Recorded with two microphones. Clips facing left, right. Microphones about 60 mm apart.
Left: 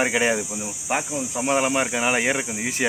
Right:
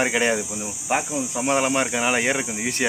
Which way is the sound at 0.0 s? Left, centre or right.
Centre.